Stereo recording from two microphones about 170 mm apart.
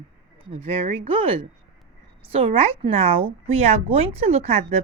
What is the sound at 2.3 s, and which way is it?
Speech, 35° right (ahead or behind).